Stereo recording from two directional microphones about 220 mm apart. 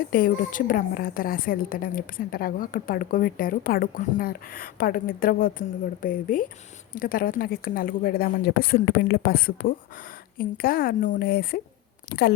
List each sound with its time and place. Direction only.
0.1 s a woman's voice: 40° left (ahead or behind)